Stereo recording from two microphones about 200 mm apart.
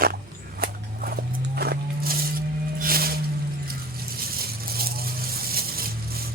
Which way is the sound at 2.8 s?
45° right (ahead or behind).